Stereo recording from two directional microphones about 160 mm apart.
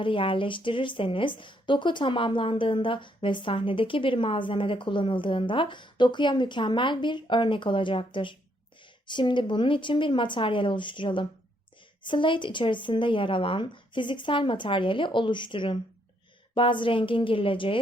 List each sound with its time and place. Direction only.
0.0 s a woman's voice: 30° left (ahead or behind)